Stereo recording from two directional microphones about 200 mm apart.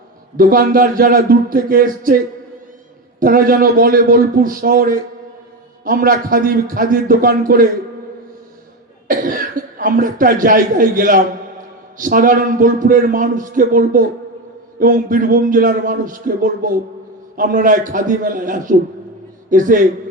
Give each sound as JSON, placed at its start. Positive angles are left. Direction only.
{"t": 0.3, "sound": "a man's voice", "side_deg": -45}
{"t": 3.2, "sound": "a man's voice", "side_deg": -45}
{"t": 9.0, "sound": "a man's voice", "side_deg": -45}